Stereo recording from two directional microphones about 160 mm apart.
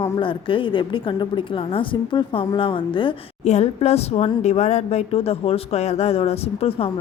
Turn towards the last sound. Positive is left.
turn(degrees=40)  # may be behind; listen again after turning